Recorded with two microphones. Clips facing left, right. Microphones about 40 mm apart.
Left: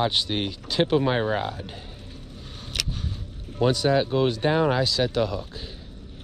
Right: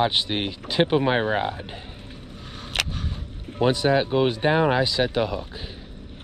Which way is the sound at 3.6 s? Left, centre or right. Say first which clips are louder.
Right 1 dB; right.